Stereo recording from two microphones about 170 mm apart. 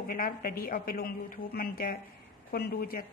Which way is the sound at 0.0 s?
55° left (ahead or behind).